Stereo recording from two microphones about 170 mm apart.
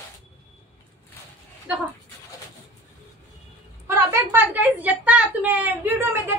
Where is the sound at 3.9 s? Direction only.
15° right (ahead or behind).